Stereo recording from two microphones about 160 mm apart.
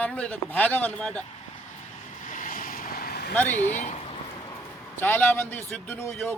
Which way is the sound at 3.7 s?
45° left (ahead or behind).